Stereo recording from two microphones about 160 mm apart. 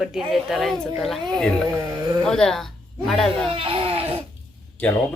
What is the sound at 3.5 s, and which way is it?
Baby cry, 35° right (ahead or behind).